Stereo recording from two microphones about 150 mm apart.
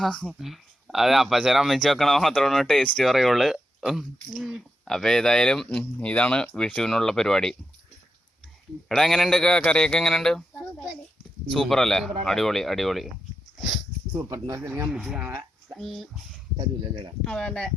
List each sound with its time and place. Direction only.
0.0 s speech: centre (ahead or behind)
8.9 s speech: centre (ahead or behind)
14.3 s speech: 20° right (ahead or behind)
14.8 s speech: 5° right (ahead or behind)
15.7 s speech: centre (ahead or behind)
16.6 s speech: 30° right (ahead or behind)
17.2 s speech: 5° left (ahead or behind)